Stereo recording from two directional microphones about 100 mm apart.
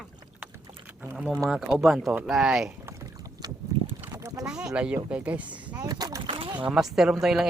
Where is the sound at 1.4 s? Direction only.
5° right (ahead or behind).